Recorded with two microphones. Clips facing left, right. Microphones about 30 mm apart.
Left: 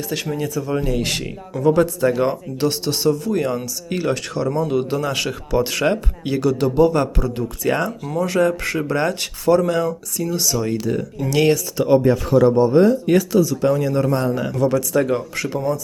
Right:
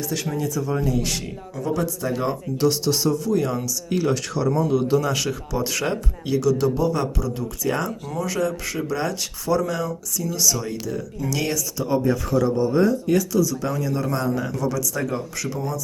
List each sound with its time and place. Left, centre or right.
0.4 s speech: left
0.8 s speech: left
7.7 s speech: left
8.1 s speech: left